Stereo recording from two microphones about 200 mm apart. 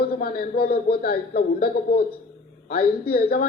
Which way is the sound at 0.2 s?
50° left (ahead or behind).